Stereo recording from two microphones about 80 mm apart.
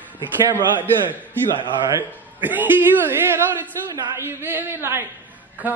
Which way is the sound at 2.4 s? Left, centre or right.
Right.